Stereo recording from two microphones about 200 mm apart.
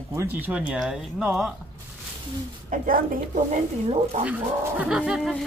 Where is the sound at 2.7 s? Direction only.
45° right (ahead or behind).